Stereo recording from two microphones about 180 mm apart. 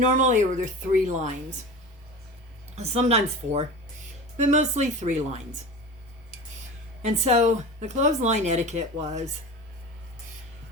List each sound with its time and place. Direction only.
0.2 s a woman's voice: 45° right (ahead or behind)
2.7 s a woman's voice: 35° right (ahead or behind)
7.0 s a woman's voice: 40° right (ahead or behind)